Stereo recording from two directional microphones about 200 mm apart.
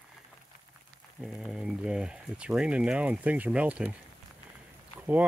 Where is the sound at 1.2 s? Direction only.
Centre (ahead or behind).